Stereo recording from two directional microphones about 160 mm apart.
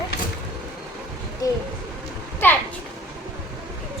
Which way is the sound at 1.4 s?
20° left (ahead or behind).